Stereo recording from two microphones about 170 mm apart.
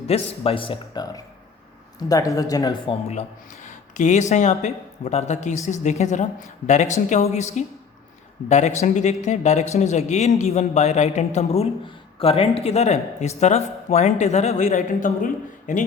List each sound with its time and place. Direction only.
0.1 s speech: 35° left (ahead or behind)
2.9 s a woman's voice: 40° left (ahead or behind)